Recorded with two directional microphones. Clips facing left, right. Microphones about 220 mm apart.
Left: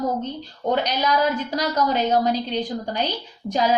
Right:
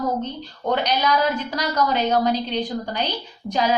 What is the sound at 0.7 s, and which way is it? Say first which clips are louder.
A woman's voice: right 1 dB; 45° left (ahead or behind).